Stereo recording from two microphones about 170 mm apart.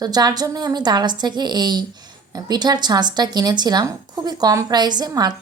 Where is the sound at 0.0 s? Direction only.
25° right (ahead or behind).